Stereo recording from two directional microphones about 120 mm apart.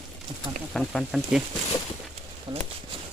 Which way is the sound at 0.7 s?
Centre (ahead or behind).